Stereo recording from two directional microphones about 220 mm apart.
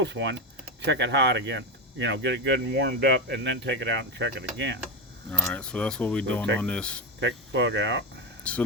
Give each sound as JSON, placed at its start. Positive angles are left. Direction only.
{"t": 0.0, "sound": "speech", "side_deg": -55}
{"t": 5.3, "sound": "speech", "side_deg": 5}
{"t": 7.2, "sound": "speech", "side_deg": -55}
{"t": 8.4, "sound": "speech", "side_deg": 5}